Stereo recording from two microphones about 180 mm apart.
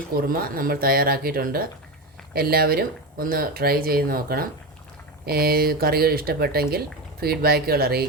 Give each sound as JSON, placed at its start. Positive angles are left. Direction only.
{"t": 0.2, "sound": "speech", "side_deg": -55}